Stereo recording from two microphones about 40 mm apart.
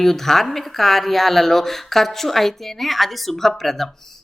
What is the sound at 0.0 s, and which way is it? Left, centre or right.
Speech, centre.